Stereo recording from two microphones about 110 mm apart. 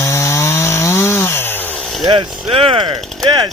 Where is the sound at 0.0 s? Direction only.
25° left (ahead or behind).